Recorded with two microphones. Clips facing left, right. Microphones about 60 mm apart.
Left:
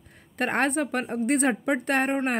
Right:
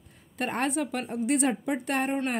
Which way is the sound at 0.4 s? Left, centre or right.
Left.